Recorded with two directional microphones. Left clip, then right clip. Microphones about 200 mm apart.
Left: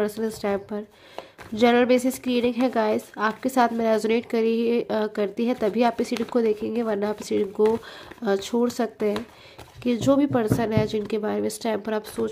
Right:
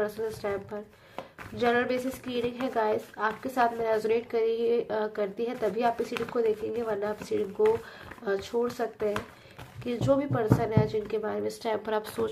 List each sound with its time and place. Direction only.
0.0 s speech: 40° left (ahead or behind)